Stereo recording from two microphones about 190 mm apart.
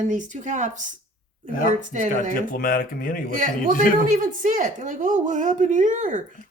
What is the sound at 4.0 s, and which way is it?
Speech, 45° right (ahead or behind).